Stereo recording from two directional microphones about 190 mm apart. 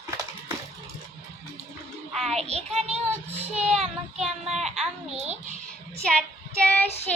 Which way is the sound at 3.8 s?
Centre (ahead or behind).